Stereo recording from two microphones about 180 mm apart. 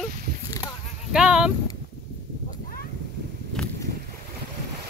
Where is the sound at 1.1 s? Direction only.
5° right (ahead or behind).